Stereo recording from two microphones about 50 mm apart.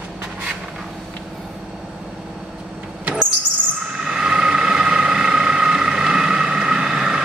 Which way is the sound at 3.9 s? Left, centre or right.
Centre.